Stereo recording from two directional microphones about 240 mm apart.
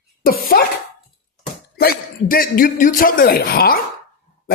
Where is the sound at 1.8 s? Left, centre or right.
Left.